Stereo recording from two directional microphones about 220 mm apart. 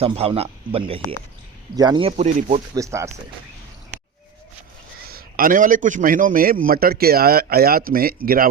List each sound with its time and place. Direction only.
0.0 s speech: 25° right (ahead or behind)
2.7 s speech: 15° right (ahead or behind)
5.0 s a man's voice: 40° right (ahead or behind)